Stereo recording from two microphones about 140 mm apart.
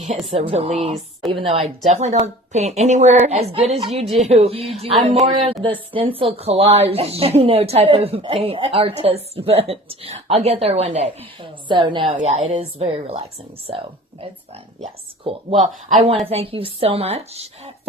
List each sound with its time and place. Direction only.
0.1 s a woman's voice: 45° right (ahead or behind)
1.9 s a woman's voice: 55° right (ahead or behind)
11.7 s a woman's voice: 35° right (ahead or behind)
12.5 s a woman's voice: 45° right (ahead or behind)
15.6 s speech: 55° right (ahead or behind)
16.2 s a woman's voice: 45° right (ahead or behind)